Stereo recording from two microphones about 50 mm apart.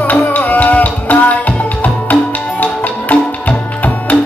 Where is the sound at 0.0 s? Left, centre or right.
Left.